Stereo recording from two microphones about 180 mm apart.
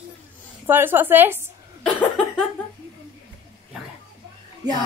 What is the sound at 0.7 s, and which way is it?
Speech, 10° right (ahead or behind).